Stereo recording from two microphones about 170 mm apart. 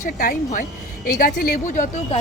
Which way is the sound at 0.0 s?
50° left (ahead or behind).